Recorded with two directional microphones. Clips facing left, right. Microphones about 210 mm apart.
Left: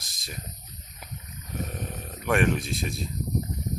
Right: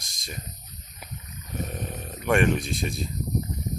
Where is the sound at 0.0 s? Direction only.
5° left (ahead or behind).